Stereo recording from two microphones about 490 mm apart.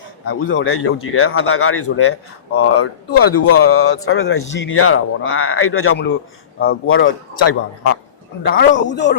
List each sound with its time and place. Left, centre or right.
0.3 s a man's voice: left
8.5 s a man's voice: left